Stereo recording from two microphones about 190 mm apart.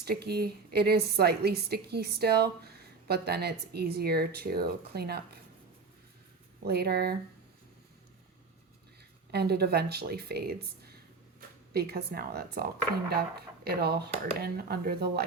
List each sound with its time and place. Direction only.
0.0 s a woman's voice: 55° right (ahead or behind)
6.7 s a woman's voice: 55° right (ahead or behind)
9.3 s a woman's voice: 55° right (ahead or behind)